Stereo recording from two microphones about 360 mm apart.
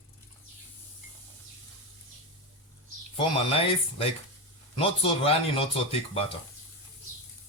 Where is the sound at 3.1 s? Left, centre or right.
Centre.